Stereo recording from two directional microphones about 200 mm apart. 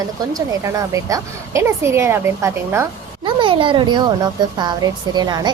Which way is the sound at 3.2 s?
25° right (ahead or behind).